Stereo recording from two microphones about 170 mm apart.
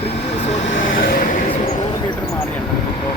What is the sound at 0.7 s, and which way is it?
Vehicle, 65° left (ahead or behind).